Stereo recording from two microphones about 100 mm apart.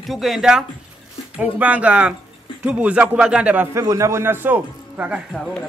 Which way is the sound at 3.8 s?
30° right (ahead or behind).